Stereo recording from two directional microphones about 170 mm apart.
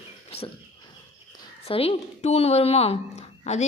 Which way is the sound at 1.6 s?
35° left (ahead or behind).